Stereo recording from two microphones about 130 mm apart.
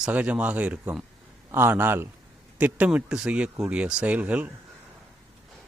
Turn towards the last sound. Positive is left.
turn(degrees=-10)  # may be behind; listen again after turning